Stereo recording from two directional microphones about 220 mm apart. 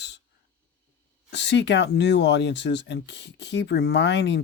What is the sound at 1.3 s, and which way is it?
Speech, 50° left (ahead or behind).